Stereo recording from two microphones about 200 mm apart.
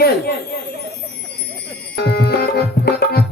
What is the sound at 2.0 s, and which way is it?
Music, 50° left (ahead or behind).